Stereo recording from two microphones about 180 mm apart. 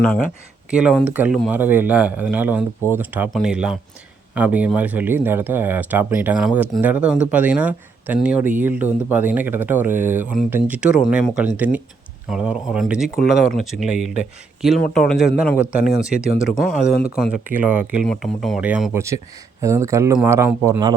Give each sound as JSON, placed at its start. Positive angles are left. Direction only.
{"t": 0.7, "sound": "a man's voice", "side_deg": -5}